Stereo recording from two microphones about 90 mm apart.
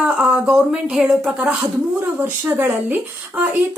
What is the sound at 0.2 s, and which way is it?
Speech, 10° right (ahead or behind).